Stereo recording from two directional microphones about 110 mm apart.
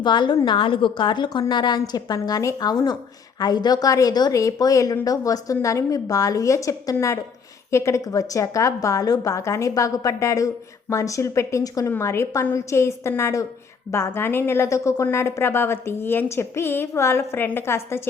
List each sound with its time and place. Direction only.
0.0 s a woman's voice: 45° left (ahead or behind); by 18.1 s 20° left (ahead or behind)